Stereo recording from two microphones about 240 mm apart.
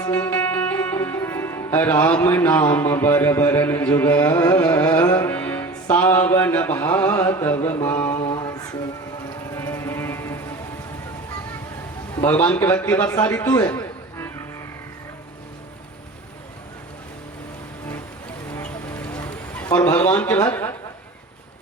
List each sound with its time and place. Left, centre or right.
0.0 s speech: centre
8.2 s music: centre
12.2 s a man's voice: centre
18.5 s a sound: centre
19.6 s a man's voice: centre